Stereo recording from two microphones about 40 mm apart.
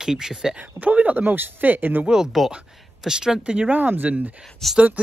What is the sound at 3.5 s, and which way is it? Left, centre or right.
Speech, right.